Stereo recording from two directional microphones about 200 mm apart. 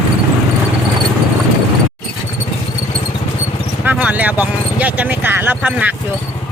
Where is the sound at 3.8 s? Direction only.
10° right (ahead or behind).